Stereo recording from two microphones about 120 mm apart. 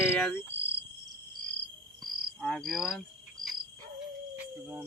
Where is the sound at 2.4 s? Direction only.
Centre (ahead or behind).